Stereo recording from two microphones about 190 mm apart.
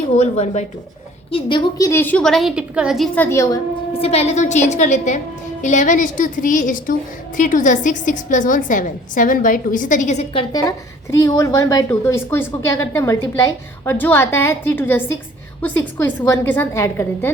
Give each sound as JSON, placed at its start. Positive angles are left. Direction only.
{"t": 0.1, "sound": "a woman's voice", "side_deg": 35}
{"t": 1.9, "sound": "a woman's voice", "side_deg": 10}
{"t": 3.2, "sound": "a woman's voice", "side_deg": 15}
{"t": 3.9, "sound": "a woman's voice", "side_deg": 30}
{"t": 11.3, "sound": "a woman's voice", "side_deg": 15}